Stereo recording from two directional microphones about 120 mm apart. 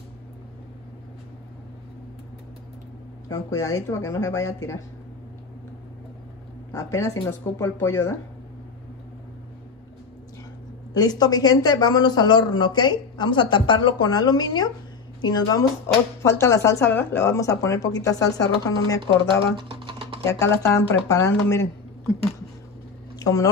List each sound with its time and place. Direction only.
3.3 s speech: 30° left (ahead or behind)
6.7 s speech: 25° left (ahead or behind)
11.0 s speech: 35° left (ahead or behind)
19.5 s typing: 45° right (ahead or behind)
20.2 s speech: 25° left (ahead or behind)
23.1 s speech: 30° left (ahead or behind)